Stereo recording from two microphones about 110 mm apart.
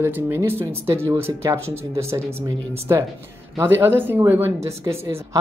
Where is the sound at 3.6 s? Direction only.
20° right (ahead or behind).